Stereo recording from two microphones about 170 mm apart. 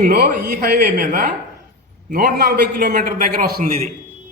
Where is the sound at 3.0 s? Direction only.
55° right (ahead or behind).